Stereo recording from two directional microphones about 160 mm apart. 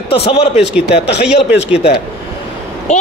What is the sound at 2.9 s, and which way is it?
Speech, 45° left (ahead or behind).